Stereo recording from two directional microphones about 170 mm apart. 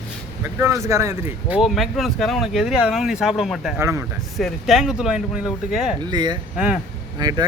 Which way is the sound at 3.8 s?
15° right (ahead or behind).